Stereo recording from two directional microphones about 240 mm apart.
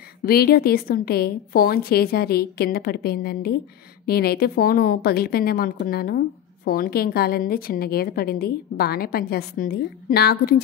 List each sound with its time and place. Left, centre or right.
0.2 s a woman's voice: left